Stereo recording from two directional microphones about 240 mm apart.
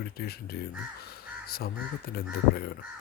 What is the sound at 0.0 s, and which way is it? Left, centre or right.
Speech, left.